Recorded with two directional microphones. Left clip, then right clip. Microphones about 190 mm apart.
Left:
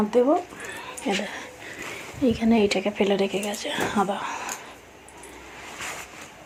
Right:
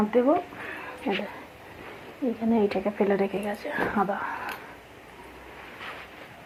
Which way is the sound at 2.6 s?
25° left (ahead or behind).